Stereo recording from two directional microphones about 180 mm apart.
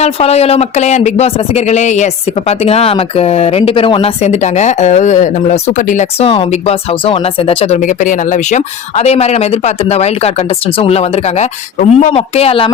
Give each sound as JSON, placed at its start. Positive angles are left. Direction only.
{"t": 0.0, "sound": "speech", "side_deg": 35}